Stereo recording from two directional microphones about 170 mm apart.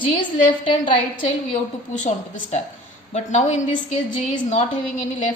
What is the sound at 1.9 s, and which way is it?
A woman's voice, 45° left (ahead or behind).